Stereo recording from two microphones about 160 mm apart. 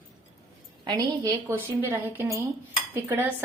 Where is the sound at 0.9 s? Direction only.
20° right (ahead or behind).